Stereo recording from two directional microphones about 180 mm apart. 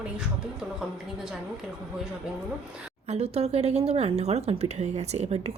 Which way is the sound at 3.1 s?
35° right (ahead or behind).